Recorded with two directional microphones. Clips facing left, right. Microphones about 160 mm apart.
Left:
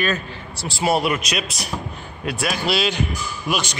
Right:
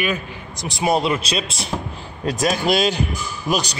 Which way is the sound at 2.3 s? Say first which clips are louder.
Right 4 dB; 40° right (ahead or behind).